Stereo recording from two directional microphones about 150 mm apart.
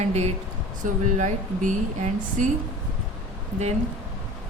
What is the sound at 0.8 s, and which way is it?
Speech, 55° right (ahead or behind).